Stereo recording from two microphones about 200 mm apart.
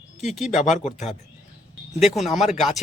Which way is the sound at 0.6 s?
35° left (ahead or behind).